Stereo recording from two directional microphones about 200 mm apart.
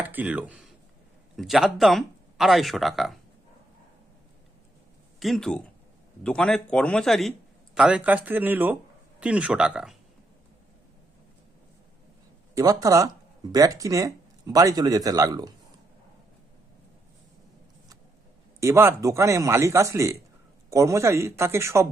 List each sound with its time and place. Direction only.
0.0 s speech: 10° right (ahead or behind)
5.2 s speech: centre (ahead or behind)
12.5 s speech: 15° right (ahead or behind)
18.6 s speech: 15° right (ahead or behind)